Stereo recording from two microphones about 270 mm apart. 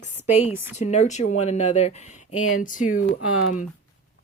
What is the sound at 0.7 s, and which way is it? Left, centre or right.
Speech, left.